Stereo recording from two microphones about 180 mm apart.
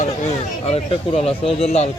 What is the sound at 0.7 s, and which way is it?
Speech, 35° left (ahead or behind).